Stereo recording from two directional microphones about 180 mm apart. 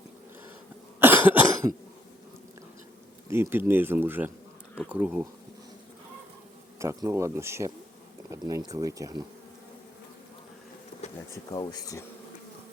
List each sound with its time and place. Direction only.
0.9 s cough: 10° right (ahead or behind)
3.2 s speech: 15° right (ahead or behind)
6.7 s speech: 15° right (ahead or behind)
11.5 s speech: 20° left (ahead or behind)